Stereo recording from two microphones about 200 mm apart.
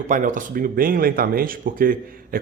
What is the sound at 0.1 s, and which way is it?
Speech, 40° right (ahead or behind).